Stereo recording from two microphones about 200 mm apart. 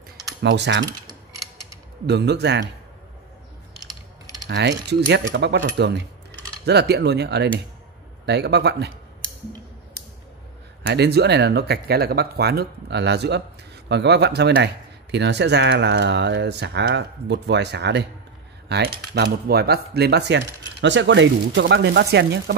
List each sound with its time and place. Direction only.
0.4 s speech: 65° right (ahead or behind)
2.0 s speech: 55° right (ahead or behind)
4.5 s speech: 60° right (ahead or behind)
10.8 s speech: 55° right (ahead or behind)